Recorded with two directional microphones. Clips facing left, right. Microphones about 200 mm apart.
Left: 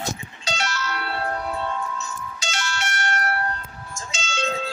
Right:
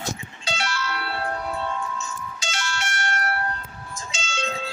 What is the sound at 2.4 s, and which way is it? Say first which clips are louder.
Music: left 1 dB; 40° left (ahead or behind).